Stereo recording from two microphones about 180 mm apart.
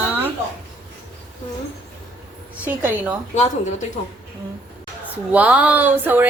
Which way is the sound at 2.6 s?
10° right (ahead or behind).